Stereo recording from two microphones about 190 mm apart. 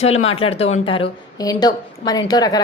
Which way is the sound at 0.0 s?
30° left (ahead or behind).